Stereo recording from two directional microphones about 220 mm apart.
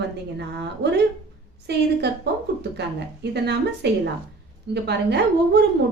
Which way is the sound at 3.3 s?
50° right (ahead or behind).